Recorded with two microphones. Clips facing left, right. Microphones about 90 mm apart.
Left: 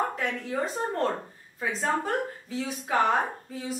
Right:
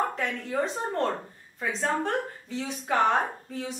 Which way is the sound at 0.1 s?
Centre (ahead or behind).